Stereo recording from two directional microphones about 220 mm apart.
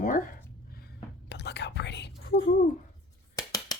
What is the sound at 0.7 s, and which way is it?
Whispering, 50° left (ahead or behind).